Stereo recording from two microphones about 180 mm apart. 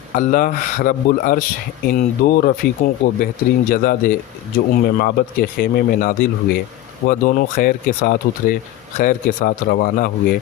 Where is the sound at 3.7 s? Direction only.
50° left (ahead or behind).